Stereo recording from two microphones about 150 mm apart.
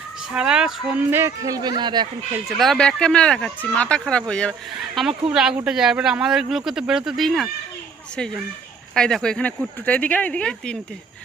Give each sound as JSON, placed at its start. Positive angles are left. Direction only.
{"t": 0.3, "sound": "speech", "side_deg": -5}
{"t": 1.2, "sound": "speech", "side_deg": -25}
{"t": 2.6, "sound": "speech", "side_deg": 5}
{"t": 9.0, "sound": "speech", "side_deg": 5}